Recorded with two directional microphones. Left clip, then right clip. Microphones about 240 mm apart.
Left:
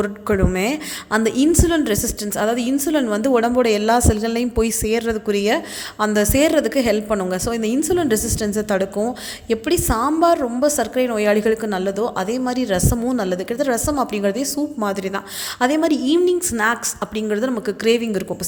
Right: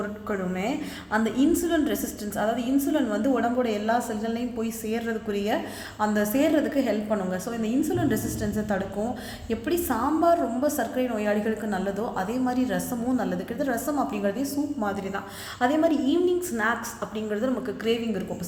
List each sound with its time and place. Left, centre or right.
0.0 s a woman's voice: left